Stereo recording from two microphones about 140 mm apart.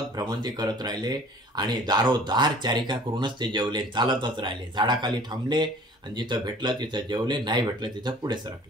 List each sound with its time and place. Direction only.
0.2 s speech: 30° right (ahead or behind)